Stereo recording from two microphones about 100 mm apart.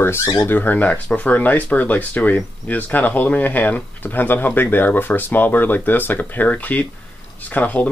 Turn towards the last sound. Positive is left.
turn(degrees=15)  # may be behind; listen again after turning